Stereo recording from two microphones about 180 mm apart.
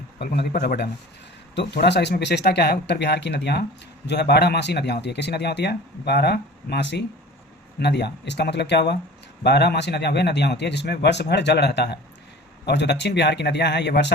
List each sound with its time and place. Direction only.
0.2 s a man's voice: 65° left (ahead or behind)